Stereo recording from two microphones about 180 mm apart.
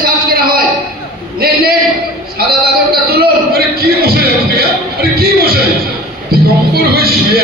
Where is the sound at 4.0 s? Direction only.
60° right (ahead or behind).